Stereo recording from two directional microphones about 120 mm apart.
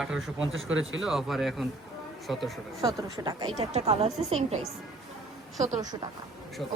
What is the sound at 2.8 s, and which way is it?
Speech, 35° right (ahead or behind).